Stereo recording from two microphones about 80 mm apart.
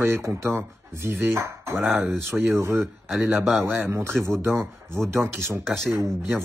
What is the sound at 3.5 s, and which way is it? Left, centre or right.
Speech, right.